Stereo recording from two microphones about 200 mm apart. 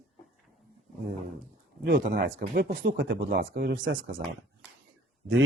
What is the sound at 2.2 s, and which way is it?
Speech, 45° right (ahead or behind).